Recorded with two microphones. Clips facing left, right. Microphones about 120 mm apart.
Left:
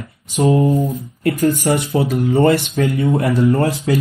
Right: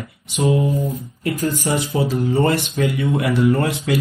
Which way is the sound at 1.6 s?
55° left (ahead or behind).